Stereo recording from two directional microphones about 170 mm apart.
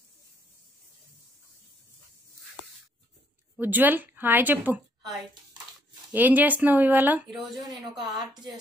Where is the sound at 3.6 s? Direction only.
10° right (ahead or behind).